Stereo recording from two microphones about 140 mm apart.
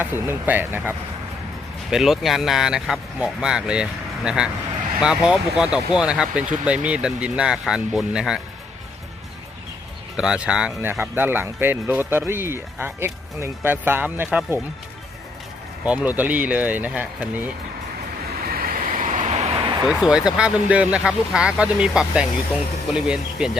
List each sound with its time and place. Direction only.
0.0 s speech: 15° right (ahead or behind)
1.9 s speech: centre (ahead or behind)
10.2 s speech: 5° right (ahead or behind)
15.9 s speech: 10° right (ahead or behind)
18.4 s vehicle: 90° right; by 19.5 s 60° right (ahead or behind)
19.8 s speech: 5° right (ahead or behind)